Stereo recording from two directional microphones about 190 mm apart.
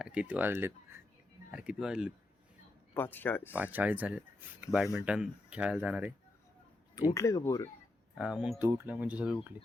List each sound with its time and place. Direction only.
0.0 s speech: 5° right (ahead or behind)
2.9 s speech: 10° left (ahead or behind)
3.5 s speech: 10° right (ahead or behind)
7.1 s speech: 15° left (ahead or behind)
8.2 s speech: 5° right (ahead or behind)